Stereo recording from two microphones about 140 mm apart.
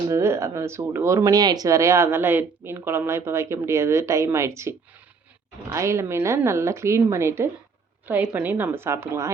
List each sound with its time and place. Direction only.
0.1 s a woman's voice: 20° right (ahead or behind)